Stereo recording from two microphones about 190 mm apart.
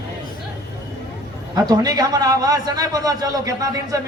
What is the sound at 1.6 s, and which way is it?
A man's voice, 20° right (ahead or behind).